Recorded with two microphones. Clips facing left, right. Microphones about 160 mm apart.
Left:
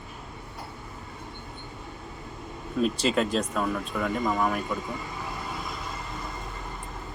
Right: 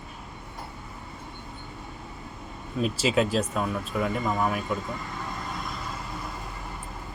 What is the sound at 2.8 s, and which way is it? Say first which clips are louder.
Speech: even; 5° right (ahead or behind).